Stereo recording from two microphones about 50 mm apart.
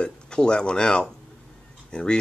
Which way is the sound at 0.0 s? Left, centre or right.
Centre.